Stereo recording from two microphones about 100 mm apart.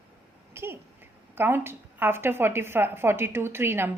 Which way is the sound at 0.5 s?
25° right (ahead or behind).